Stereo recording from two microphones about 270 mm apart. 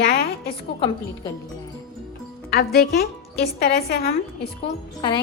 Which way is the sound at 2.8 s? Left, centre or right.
Left.